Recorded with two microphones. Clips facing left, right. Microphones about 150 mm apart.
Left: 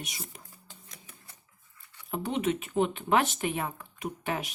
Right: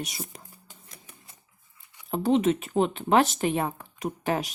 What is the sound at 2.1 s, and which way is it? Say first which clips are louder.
Speech: right 7 dB; 35° right (ahead or behind).